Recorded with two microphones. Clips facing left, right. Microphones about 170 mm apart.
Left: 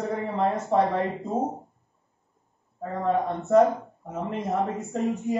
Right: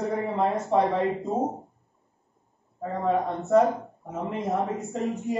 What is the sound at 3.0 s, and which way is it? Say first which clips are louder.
A man's voice: even; centre (ahead or behind).